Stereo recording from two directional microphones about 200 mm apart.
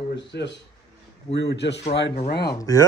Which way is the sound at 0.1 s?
60° left (ahead or behind).